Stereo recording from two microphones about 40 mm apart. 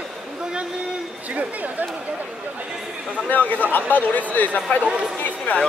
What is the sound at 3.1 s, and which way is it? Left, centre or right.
A man's voice, left.